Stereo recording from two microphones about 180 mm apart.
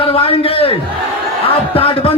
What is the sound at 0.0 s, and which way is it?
A man's voice, 30° left (ahead or behind).